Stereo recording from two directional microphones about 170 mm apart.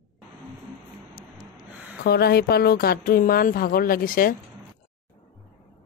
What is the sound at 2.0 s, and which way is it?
Speech, 70° left (ahead or behind).